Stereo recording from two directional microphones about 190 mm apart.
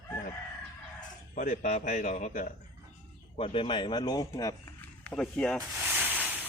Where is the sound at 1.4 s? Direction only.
40° left (ahead or behind).